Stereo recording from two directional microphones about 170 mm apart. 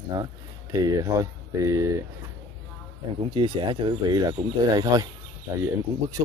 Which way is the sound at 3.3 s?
30° right (ahead or behind).